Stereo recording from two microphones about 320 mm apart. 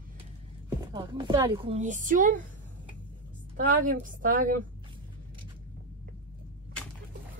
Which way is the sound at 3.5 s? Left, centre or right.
Right.